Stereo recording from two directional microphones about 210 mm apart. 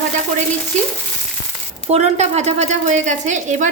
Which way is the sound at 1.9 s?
30° right (ahead or behind).